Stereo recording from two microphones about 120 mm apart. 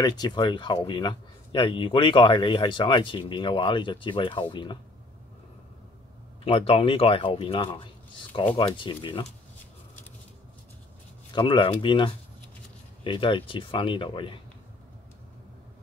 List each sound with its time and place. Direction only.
0.0 s speech: 35° left (ahead or behind)
6.4 s speech: 55° left (ahead or behind)
11.3 s speech: 40° left (ahead or behind)